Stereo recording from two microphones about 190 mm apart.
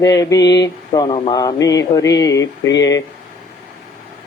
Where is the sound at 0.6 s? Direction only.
25° left (ahead or behind).